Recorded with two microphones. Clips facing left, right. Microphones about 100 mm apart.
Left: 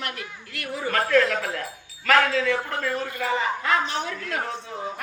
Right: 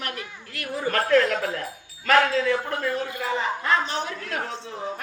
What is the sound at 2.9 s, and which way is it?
Speech, 20° right (ahead or behind).